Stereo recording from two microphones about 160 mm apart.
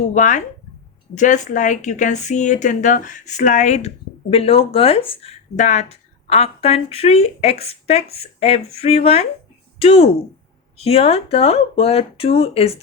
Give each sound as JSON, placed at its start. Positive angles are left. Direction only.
{"t": 0.1, "sound": "a woman's voice", "side_deg": 50}
{"t": 5.5, "sound": "speech", "side_deg": 45}